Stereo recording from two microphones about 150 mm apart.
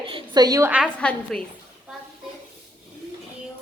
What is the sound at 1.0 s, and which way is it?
Speech, 10° left (ahead or behind).